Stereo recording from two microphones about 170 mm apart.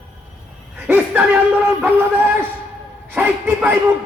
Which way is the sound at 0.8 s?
10° right (ahead or behind).